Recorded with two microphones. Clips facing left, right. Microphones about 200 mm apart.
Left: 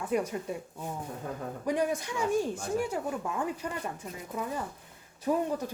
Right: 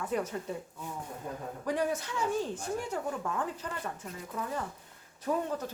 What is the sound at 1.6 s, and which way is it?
Speech, 15° left (ahead or behind).